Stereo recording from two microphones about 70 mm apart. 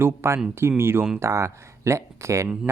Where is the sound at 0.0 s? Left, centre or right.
Right.